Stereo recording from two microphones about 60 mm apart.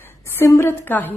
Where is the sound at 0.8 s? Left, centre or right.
Left.